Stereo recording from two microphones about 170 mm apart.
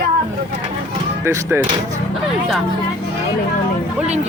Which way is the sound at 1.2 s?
15° right (ahead or behind).